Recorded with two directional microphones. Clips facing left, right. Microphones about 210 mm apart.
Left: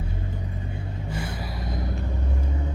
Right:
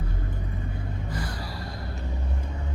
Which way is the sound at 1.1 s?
25° left (ahead or behind).